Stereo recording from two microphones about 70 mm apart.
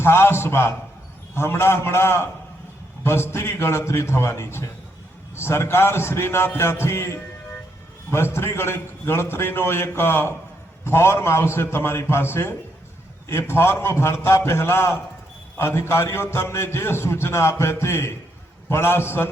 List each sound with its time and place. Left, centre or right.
0.0 s a man's voice: left